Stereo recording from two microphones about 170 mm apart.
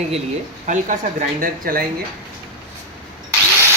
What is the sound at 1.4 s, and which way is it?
Speech, 55° right (ahead or behind).